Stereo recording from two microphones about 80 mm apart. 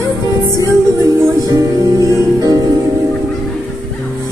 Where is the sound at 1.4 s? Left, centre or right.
Right.